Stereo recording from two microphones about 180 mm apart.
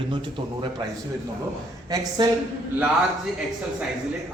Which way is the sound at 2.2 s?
25° right (ahead or behind).